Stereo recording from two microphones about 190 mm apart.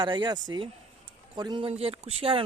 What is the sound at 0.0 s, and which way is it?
Speech, 20° right (ahead or behind).